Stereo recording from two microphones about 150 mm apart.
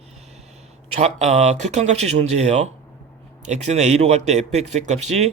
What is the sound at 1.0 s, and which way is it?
Speech, 50° right (ahead or behind).